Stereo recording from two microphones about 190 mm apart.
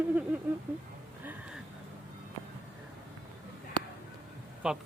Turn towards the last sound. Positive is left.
turn(degrees=-5)  # may be behind; listen again after turning